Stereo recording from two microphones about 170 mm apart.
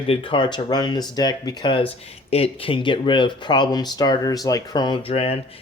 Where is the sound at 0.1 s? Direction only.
30° left (ahead or behind).